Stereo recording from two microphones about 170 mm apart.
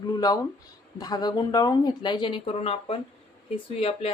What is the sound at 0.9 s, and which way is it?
Speech, 20° left (ahead or behind).